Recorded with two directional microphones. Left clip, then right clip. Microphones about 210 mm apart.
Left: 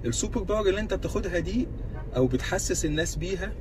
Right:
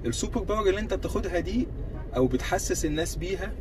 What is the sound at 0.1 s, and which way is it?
Speech, 15° left (ahead or behind).